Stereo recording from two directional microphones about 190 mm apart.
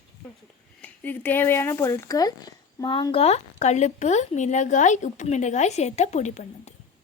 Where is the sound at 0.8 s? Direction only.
10° left (ahead or behind).